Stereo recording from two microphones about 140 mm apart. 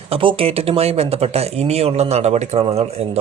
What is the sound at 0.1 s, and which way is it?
Speech, 40° right (ahead or behind).